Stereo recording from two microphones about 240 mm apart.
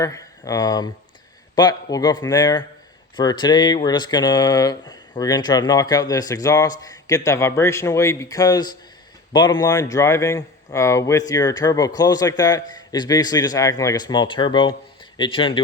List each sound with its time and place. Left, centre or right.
0.0 s speech: centre